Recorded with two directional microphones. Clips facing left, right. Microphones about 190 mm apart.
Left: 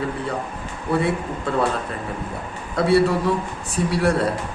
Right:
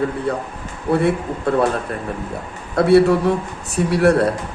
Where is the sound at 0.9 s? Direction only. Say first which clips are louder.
Right 4 dB; 55° right (ahead or behind).